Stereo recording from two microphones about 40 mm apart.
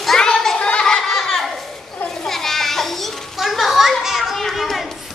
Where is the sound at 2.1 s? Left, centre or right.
Centre.